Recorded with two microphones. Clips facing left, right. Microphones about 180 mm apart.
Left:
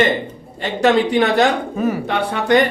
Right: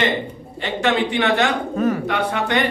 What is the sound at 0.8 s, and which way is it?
Speech, 40° left (ahead or behind).